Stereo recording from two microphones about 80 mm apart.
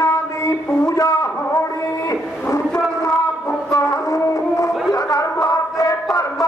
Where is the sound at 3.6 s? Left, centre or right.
Left.